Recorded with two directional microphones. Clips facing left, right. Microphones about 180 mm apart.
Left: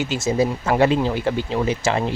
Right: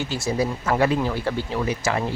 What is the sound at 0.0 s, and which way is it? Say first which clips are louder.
Speech: left 4 dB; 20° left (ahead or behind).